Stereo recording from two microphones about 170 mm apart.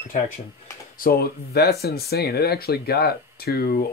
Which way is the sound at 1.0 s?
65° left (ahead or behind).